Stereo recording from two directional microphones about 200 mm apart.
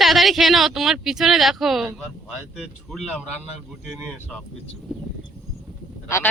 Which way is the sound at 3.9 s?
Centre (ahead or behind).